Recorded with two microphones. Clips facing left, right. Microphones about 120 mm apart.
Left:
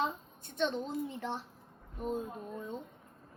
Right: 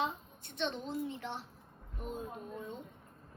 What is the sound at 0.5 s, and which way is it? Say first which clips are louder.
Speech: left 4 dB; 45° left (ahead or behind).